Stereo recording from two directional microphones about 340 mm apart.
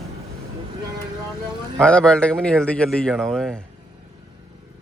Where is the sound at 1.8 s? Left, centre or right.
Centre.